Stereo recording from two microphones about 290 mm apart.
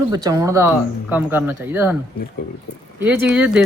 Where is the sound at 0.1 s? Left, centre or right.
Centre.